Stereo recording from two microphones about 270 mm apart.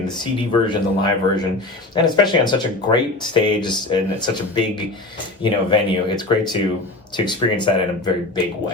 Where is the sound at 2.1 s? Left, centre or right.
Centre.